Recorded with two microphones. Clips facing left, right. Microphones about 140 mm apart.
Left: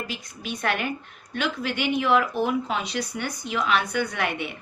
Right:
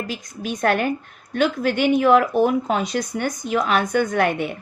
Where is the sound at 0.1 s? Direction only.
45° right (ahead or behind).